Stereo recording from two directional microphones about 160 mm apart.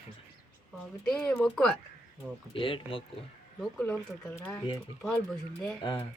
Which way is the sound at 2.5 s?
35° left (ahead or behind).